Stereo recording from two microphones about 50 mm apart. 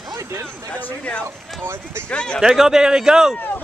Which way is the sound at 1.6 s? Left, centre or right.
Right.